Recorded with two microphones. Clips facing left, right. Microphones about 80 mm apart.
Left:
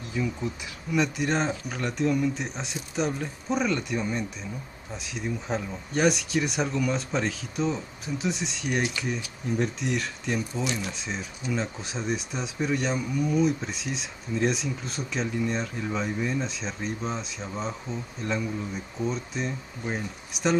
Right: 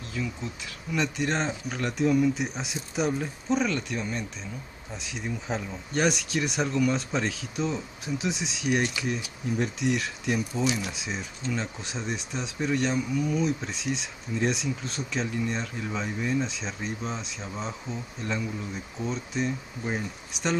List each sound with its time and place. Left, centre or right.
0.1 s speech: centre
0.9 s speech: centre